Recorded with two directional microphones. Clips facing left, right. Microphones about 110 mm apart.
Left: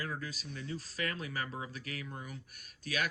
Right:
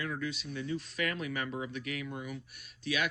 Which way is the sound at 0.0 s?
35° left (ahead or behind).